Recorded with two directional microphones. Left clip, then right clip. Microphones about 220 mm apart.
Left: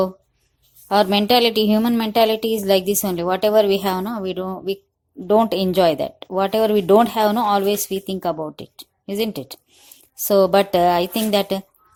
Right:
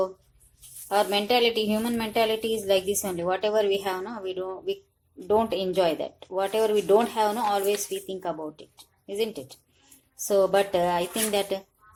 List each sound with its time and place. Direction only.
0.9 s speech: 40° left (ahead or behind)